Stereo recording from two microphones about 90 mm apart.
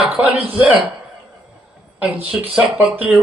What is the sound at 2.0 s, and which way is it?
Speech, 20° right (ahead or behind).